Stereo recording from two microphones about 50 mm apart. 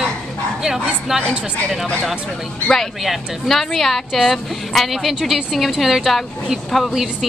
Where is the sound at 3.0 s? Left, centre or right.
Centre.